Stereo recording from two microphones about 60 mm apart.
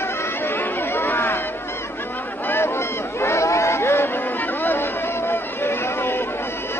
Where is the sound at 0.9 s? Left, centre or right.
Left.